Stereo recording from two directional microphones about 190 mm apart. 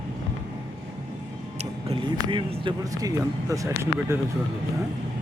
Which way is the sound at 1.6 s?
30° right (ahead or behind).